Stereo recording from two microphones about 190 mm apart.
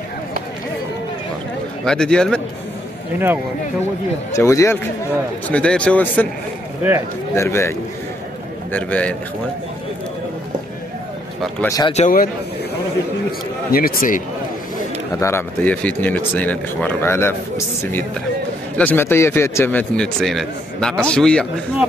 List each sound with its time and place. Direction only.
1.9 s a man's voice: 5° left (ahead or behind)
4.3 s speech: 15° left (ahead or behind)
7.3 s speech: 15° left (ahead or behind)
8.7 s speech: 5° left (ahead or behind)
11.6 s speech: 15° left (ahead or behind)
11.9 s speech: 40° left (ahead or behind)
13.7 s speech: 50° left (ahead or behind)
15.1 s speech: 15° left (ahead or behind)
18.8 s a man's voice: 10° left (ahead or behind)